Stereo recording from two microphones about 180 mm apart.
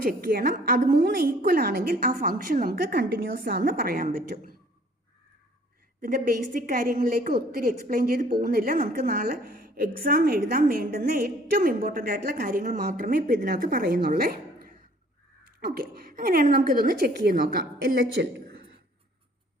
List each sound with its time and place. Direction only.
0.0 s a woman's voice: 55° right (ahead or behind)
6.0 s a woman's voice: 50° right (ahead or behind); by 18.4 s 70° right (ahead or behind)